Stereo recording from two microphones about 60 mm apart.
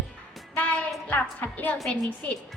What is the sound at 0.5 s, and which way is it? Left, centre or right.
Music, left.